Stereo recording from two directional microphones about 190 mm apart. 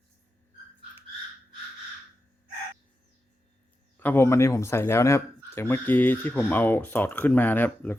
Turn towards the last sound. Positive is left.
turn(degrees=10)  # may be behind; listen again after turning